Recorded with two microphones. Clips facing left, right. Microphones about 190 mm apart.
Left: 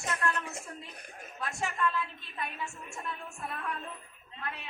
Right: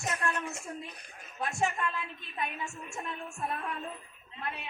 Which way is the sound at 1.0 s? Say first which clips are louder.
Left 4 dB; 50° left (ahead or behind).